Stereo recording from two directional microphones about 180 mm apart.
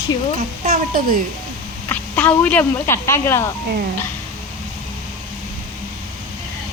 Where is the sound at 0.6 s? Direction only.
55° right (ahead or behind).